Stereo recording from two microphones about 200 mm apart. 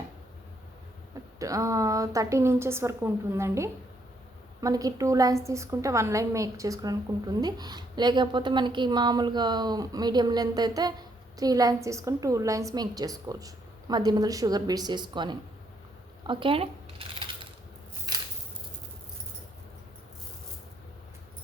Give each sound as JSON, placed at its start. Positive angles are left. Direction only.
{"t": 1.4, "sound": "a woman's voice", "side_deg": -15}
{"t": 16.2, "sound": "coin", "side_deg": -25}